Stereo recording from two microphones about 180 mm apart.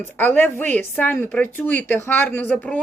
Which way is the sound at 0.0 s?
10° left (ahead or behind).